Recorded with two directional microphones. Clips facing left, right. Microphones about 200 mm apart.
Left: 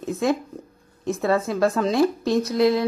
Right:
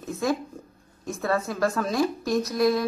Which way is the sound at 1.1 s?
25° left (ahead or behind).